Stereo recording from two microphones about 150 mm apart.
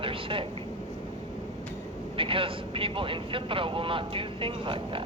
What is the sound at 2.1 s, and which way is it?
Speech, 35° right (ahead or behind).